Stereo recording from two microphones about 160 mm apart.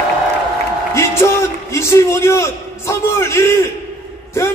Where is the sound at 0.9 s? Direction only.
15° left (ahead or behind).